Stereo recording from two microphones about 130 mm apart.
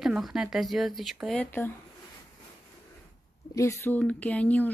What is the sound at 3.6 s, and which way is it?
Speech, 25° left (ahead or behind).